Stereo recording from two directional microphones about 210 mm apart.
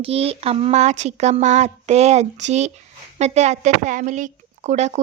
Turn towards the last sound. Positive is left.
turn(degrees=-35)  # may be behind; listen again after turning